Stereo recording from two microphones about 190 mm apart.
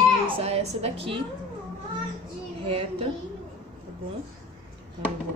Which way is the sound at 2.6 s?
30° right (ahead or behind).